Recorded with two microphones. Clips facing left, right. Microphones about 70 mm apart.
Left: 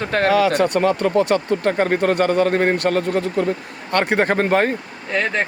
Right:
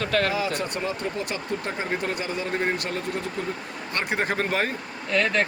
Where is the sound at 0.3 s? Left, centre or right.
Left.